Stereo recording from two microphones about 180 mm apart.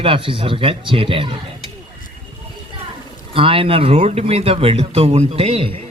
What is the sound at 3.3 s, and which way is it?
Speech, 30° right (ahead or behind).